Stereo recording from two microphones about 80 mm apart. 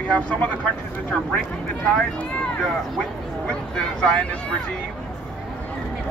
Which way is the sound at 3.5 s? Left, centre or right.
Centre.